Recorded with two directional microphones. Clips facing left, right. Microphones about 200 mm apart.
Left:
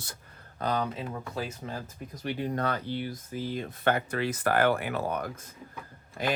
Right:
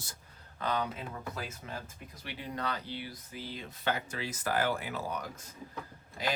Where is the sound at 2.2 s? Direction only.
45° left (ahead or behind).